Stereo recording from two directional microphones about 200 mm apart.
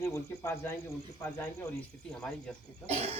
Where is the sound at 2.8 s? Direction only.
30° right (ahead or behind).